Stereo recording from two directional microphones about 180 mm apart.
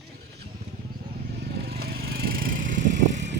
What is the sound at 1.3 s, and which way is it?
Vehicle, 60° right (ahead or behind).